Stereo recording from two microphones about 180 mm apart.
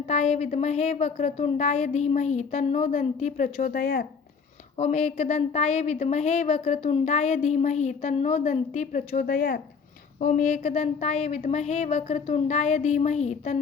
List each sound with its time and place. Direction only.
0.1 s a woman's voice: 40° left (ahead or behind); by 4.0 s 55° left (ahead or behind)
4.8 s a woman's voice: 40° left (ahead or behind); by 9.6 s 55° left (ahead or behind)
10.2 s a woman's voice: 45° left (ahead or behind)